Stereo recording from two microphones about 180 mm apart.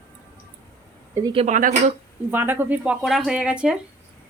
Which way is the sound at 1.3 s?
35° right (ahead or behind).